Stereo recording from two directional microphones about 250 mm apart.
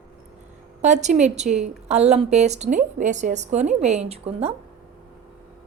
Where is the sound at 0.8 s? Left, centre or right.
Right.